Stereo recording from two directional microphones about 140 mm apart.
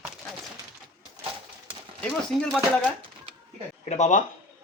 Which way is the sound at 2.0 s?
5° left (ahead or behind).